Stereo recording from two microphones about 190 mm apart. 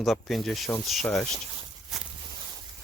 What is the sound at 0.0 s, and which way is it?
Speech, centre (ahead or behind).